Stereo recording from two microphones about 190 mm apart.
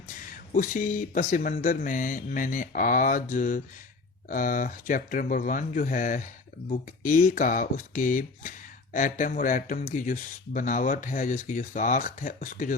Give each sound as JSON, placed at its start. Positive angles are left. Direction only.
{"t": 0.3, "sound": "speech", "side_deg": 45}